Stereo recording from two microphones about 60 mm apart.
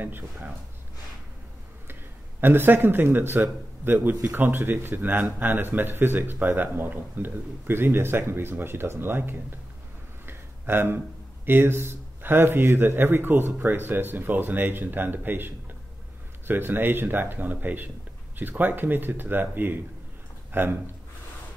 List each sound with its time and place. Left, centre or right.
0.0 s speech: right
2.4 s speech: right
10.2 s a sound: right
11.4 s speech: right